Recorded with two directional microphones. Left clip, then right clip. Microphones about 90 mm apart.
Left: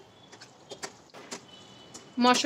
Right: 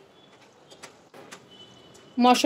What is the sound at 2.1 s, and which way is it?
Speech, 30° right (ahead or behind).